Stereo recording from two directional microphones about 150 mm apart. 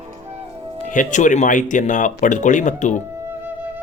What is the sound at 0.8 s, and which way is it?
Speech, 55° left (ahead or behind).